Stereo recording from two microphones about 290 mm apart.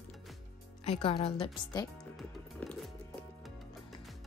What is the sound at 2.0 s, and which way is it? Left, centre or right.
Music, centre.